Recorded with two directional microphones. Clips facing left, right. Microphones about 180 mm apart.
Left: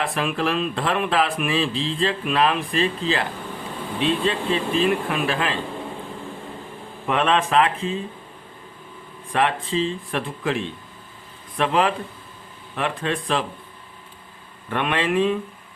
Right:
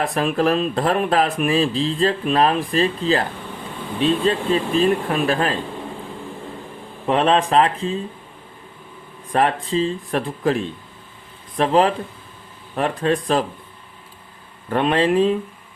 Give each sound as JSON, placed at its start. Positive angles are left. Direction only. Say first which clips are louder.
{"t": 0.0, "sound": "speech", "louder": "right 5 dB", "side_deg": -40}
{"t": 7.1, "sound": "speech", "louder": "right 3 dB", "side_deg": -35}
{"t": 9.3, "sound": "speech", "louder": "right 3 dB", "side_deg": -40}
{"t": 14.7, "sound": "speech", "louder": "right 5 dB", "side_deg": -35}